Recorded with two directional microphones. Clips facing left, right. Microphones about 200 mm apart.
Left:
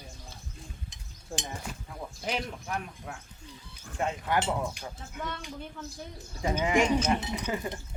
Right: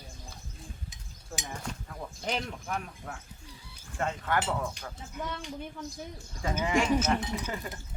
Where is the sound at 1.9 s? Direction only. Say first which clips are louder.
Left 1 dB; 10° left (ahead or behind).